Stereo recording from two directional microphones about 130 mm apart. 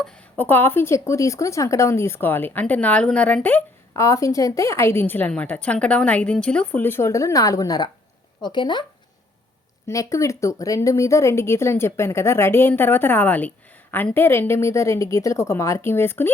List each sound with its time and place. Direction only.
0.0 s speech: 10° left (ahead or behind); by 8.8 s 35° left (ahead or behind)
9.8 s speech: 25° left (ahead or behind)